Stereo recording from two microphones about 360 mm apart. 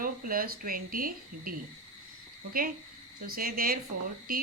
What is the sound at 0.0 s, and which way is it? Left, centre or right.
Speech, right.